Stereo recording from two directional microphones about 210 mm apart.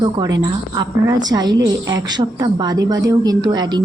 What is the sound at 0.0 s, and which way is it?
A woman's voice, 20° right (ahead or behind).